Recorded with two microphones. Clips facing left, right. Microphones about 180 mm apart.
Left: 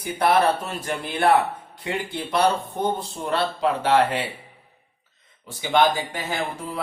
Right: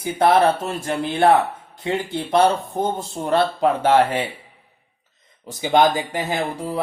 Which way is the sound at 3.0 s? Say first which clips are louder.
Right 5 dB; 45° right (ahead or behind).